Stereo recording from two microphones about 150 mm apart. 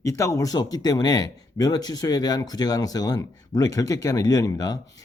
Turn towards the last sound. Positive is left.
turn(degrees=25)  # may be behind; listen again after turning